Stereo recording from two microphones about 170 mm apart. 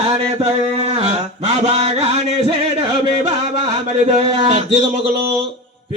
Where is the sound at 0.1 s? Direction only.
35° right (ahead or behind).